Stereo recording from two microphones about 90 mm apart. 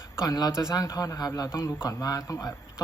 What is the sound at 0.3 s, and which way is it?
Speech, 45° left (ahead or behind).